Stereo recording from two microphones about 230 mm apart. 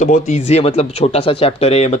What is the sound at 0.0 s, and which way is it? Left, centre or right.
Speech, left.